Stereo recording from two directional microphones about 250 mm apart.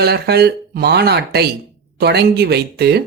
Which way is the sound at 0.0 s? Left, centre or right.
Right.